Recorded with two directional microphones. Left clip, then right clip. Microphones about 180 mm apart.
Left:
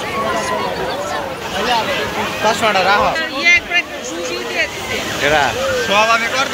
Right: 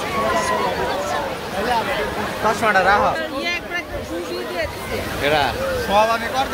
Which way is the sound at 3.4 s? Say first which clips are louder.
Left 11 dB; 50° right (ahead or behind).